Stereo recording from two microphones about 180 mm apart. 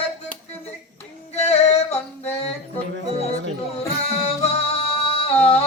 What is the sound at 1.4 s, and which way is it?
Female singing, 35° left (ahead or behind).